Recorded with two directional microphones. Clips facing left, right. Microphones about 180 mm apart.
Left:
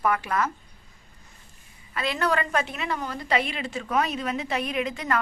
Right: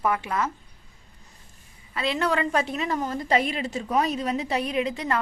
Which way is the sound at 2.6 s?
35° right (ahead or behind).